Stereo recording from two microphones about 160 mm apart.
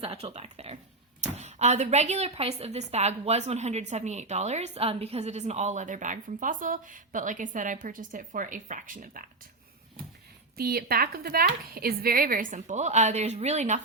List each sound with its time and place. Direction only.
0.0 s speech: 40° right (ahead or behind); by 9.3 s 55° right (ahead or behind)
10.6 s speech: 75° right (ahead or behind); by 13.8 s 45° right (ahead or behind)